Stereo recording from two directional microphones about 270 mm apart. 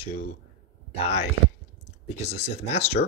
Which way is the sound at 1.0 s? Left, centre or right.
Left.